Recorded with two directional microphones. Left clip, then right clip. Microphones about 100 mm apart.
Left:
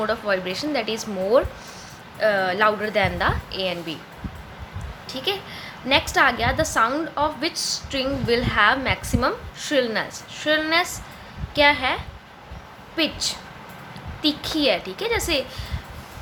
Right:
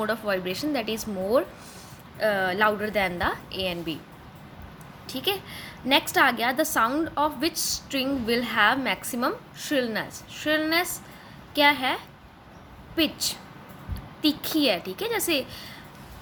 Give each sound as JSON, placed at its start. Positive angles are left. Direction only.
{"t": 0.0, "sound": "a woman's voice", "side_deg": -45}
{"t": 5.0, "sound": "a woman's voice", "side_deg": -55}
{"t": 13.0, "sound": "a woman's voice", "side_deg": -45}